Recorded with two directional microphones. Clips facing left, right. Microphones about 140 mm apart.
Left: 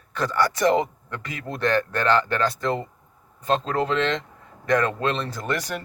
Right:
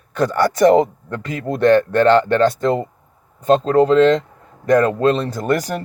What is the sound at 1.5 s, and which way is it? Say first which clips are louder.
Speech: right 10 dB; 50° right (ahead or behind).